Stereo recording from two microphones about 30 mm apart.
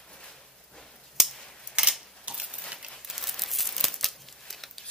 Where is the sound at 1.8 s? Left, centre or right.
Right.